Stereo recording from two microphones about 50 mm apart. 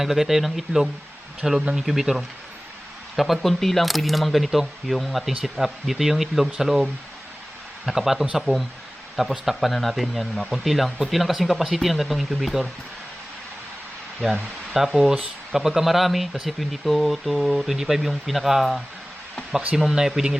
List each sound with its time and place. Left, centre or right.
0.0 s speech: centre
1.8 s speech: centre
7.9 s speech: centre
14.2 s speech: centre
14.8 s speech: centre